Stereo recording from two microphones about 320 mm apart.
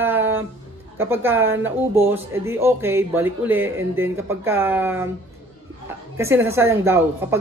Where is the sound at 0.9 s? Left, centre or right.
Centre.